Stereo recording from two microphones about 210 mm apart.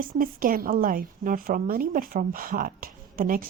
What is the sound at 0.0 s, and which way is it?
A woman's voice, 40° right (ahead or behind).